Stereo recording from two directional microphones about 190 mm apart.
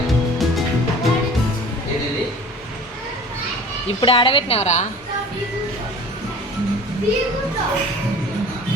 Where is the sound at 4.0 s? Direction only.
30° left (ahead or behind).